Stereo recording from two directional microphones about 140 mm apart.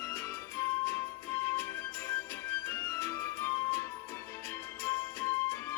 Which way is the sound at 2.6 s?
15° left (ahead or behind).